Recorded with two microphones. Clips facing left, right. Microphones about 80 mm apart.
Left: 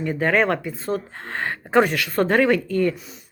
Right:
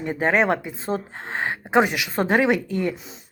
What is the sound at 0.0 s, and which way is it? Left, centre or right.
Speech, right.